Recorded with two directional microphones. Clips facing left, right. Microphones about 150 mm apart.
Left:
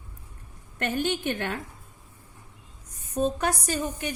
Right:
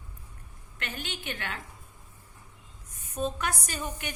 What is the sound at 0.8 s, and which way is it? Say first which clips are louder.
Speech: left 12 dB; 45° left (ahead or behind).